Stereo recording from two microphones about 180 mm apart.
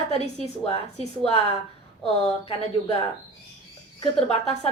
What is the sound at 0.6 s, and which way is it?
Speech, 35° left (ahead or behind).